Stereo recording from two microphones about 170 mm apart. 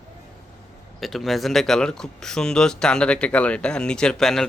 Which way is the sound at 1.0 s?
Centre (ahead or behind).